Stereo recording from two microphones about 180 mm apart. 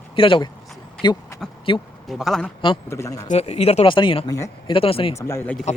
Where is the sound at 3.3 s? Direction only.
35° left (ahead or behind); by 4.7 s 20° left (ahead or behind).